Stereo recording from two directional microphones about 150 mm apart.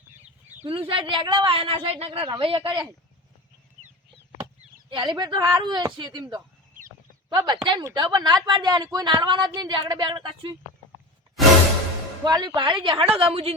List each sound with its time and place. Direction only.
0.7 s speech: 35° right (ahead or behind)
4.9 s a woman's voice: 30° right (ahead or behind)
7.3 s a woman's voice: 30° right (ahead or behind)
12.2 s speech: 30° right (ahead or behind)